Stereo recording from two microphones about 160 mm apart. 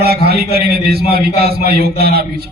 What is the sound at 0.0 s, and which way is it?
A man's voice, 80° right.